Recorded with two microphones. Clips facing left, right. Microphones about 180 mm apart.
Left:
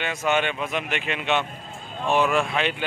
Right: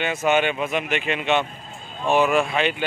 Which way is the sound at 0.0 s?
5° right (ahead or behind).